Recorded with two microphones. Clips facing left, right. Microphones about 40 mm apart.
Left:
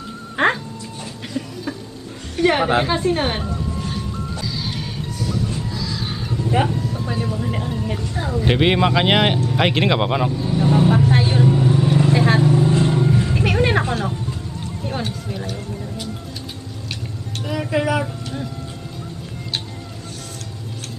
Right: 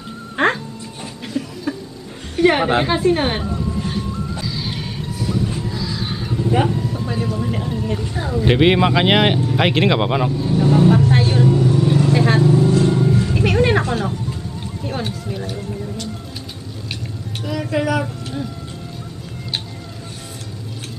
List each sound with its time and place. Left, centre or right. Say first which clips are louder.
0.4 s music: even; centre
1.2 s a sound: right 3 dB; centre
2.3 s speech: right 2 dB; centre
4.4 s a sound: right 1 dB; centre
6.5 s speech: right 1 dB; centre
6.8 s vehicle: right 1 dB; centre
8.5 s speech: right 3 dB; centre
11.5 s vehicle: right 1 dB; centre
12.6 s music: right 2 dB; left
13.0 s vehicle: right 1 dB; centre
14.9 s a sound: right 1 dB; centre
17.4 s music: even; centre